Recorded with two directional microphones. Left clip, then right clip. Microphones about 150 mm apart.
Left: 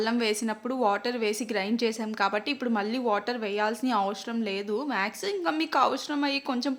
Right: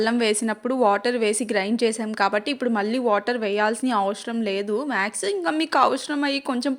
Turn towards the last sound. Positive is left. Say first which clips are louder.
# right 4 dB
turn(degrees=-25)  # may be behind; listen again after turning